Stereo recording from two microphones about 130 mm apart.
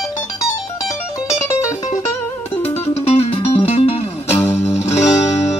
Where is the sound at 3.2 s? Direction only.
45° left (ahead or behind).